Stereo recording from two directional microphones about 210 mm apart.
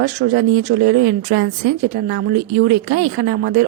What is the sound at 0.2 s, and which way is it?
A woman's voice, 45° right (ahead or behind).